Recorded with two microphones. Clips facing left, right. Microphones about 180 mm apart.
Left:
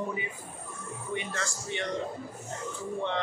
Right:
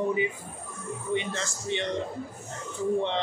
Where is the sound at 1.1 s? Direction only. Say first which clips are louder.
Right 4 dB; 20° right (ahead or behind).